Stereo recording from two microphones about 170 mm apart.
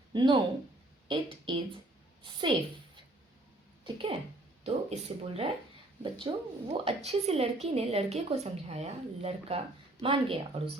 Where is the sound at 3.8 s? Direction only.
30° right (ahead or behind).